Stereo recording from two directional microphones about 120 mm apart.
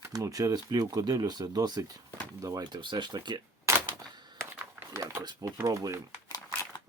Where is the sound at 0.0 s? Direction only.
25° right (ahead or behind).